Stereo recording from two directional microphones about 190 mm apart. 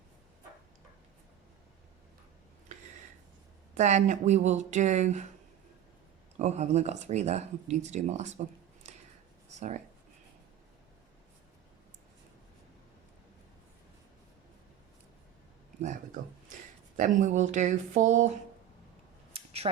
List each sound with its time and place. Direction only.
3.8 s speech: 40° right (ahead or behind)
6.4 s speech: 35° right (ahead or behind)
9.6 s speech: 40° right (ahead or behind)
17.0 s speech: 40° right (ahead or behind)
19.3 s a sound: 30° right (ahead or behind)